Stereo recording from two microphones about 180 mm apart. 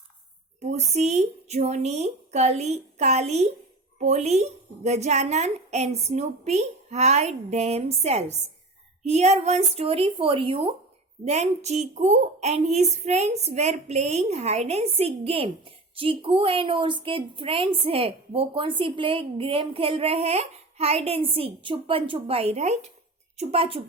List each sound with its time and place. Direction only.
0.6 s a woman's voice: 40° right (ahead or behind)